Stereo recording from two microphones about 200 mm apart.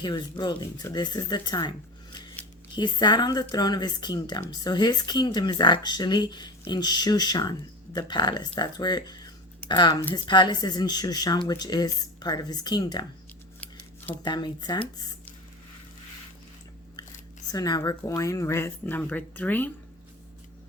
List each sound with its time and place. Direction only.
0.0 s speech: 20° left (ahead or behind)
2.7 s speech: 20° left (ahead or behind)
13.6 s scissors: 10° left (ahead or behind)
14.3 s speech: 20° left (ahead or behind)
17.5 s speech: 20° left (ahead or behind)